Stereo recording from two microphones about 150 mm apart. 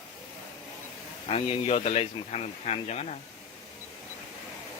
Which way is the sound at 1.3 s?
40° left (ahead or behind).